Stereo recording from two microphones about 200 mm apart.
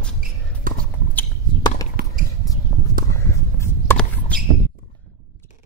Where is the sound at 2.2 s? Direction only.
45° right (ahead or behind).